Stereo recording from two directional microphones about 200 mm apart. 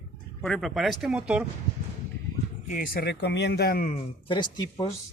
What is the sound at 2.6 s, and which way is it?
Speech, 45° left (ahead or behind).